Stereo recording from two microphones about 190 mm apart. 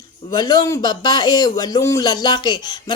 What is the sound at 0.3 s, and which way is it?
A woman's voice, 20° left (ahead or behind).